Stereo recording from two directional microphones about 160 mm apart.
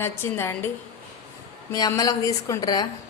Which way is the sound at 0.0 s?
15° left (ahead or behind).